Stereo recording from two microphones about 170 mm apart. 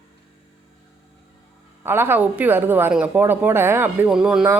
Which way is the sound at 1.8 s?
15° right (ahead or behind).